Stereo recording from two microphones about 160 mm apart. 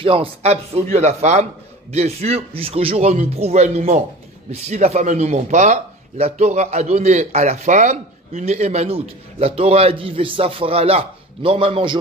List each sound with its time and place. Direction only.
0.0 s speech: 35° right (ahead or behind)